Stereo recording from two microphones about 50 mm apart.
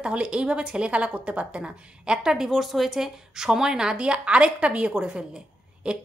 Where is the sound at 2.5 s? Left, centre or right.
Centre.